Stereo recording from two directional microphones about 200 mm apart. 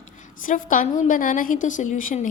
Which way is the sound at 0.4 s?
45° left (ahead or behind).